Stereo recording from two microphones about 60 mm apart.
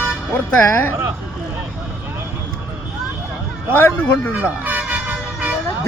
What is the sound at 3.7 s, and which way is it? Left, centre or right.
Speech, left.